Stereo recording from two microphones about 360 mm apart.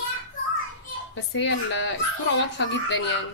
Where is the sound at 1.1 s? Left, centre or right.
Left.